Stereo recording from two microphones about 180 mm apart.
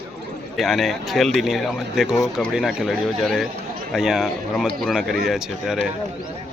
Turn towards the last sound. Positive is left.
turn(degrees=-5)  # may be behind; listen again after turning